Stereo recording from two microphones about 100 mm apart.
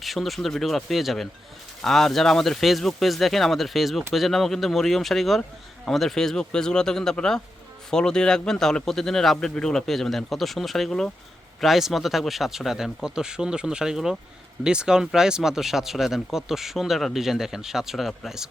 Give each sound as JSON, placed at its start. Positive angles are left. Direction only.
{"t": 0.0, "sound": "speech", "side_deg": 0}